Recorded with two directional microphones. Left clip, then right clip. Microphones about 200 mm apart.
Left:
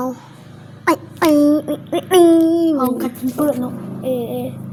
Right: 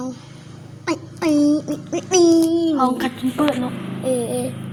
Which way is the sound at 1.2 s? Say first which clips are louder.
Left 4 dB; 25° left (ahead or behind).